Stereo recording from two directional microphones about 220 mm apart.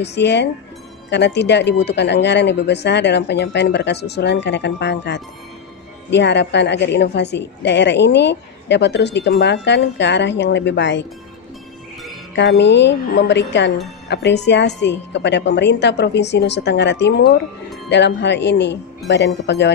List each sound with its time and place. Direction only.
0.0 s speech: 50° left (ahead or behind)
12.4 s speech: 50° left (ahead or behind)